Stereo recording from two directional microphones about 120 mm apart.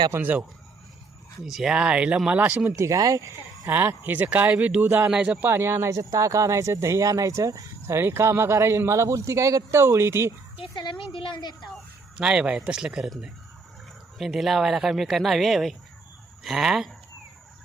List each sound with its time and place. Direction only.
0.1 s speech: 15° right (ahead or behind)
1.5 s speech: 5° right (ahead or behind)
2.7 s speech: 25° right (ahead or behind)
10.6 s a woman's voice: 40° left (ahead or behind)
11.6 s speech: 5° right (ahead or behind)